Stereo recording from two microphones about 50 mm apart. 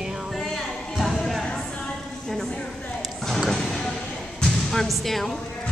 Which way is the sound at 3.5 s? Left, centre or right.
Centre.